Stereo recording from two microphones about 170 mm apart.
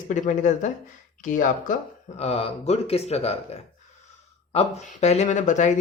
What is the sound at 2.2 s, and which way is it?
Speech, 35° left (ahead or behind).